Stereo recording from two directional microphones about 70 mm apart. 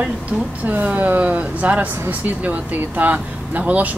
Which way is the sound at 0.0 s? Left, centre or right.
Centre.